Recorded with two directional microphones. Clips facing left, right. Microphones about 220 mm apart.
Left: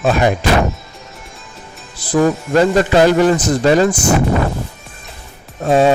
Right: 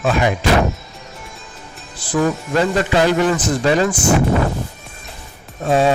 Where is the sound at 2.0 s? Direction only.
40° left (ahead or behind).